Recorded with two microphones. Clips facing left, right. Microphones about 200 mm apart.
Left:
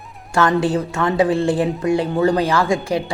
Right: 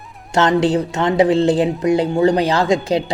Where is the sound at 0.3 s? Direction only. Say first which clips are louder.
Right 2 dB; 20° right (ahead or behind).